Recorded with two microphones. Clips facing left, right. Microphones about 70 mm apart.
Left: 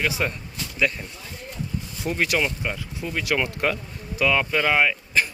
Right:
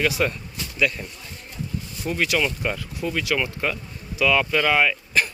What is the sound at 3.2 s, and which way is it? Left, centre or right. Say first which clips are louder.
Speech: left 5 dB; left.